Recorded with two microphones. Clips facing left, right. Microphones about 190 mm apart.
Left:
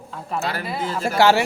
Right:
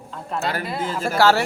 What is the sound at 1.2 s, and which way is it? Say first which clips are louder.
Speech: left 1 dB; 15° left (ahead or behind).